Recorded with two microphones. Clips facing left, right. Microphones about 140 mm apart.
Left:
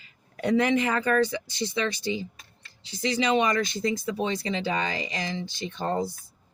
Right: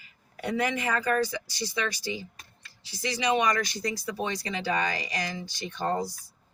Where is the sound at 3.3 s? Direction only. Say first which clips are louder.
Left 2 dB; 25° left (ahead or behind).